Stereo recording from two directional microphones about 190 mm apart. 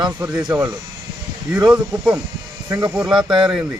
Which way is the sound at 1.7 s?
5° right (ahead or behind).